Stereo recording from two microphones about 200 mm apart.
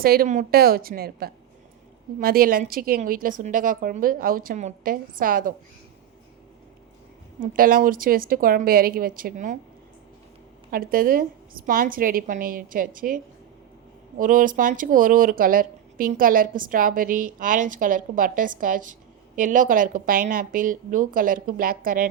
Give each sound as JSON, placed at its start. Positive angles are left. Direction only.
{"t": 0.0, "sound": "speech", "side_deg": -45}
{"t": 7.3, "sound": "speech", "side_deg": -45}
{"t": 10.7, "sound": "speech", "side_deg": -45}
{"t": 14.2, "sound": "speech", "side_deg": -40}